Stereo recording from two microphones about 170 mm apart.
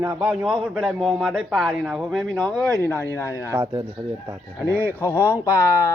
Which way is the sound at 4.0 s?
30° right (ahead or behind).